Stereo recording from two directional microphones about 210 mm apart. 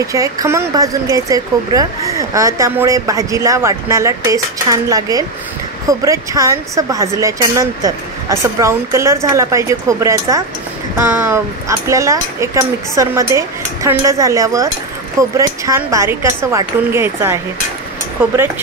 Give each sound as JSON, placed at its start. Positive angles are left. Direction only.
{"t": 0.0, "sound": "speech", "side_deg": -15}